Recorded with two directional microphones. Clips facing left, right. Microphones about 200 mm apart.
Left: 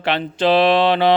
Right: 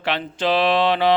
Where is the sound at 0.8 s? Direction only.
30° left (ahead or behind).